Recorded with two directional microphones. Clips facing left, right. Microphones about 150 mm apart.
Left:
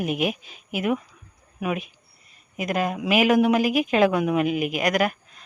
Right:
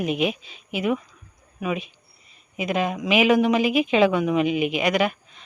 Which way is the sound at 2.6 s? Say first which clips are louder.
Right 1 dB; centre (ahead or behind).